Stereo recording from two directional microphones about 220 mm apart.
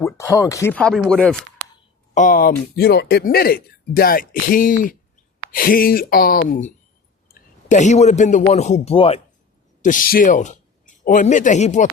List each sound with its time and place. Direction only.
0.0 s speech: 15° left (ahead or behind)
2.1 s a man's voice: 35° left (ahead or behind)
9.8 s speech: 40° left (ahead or behind)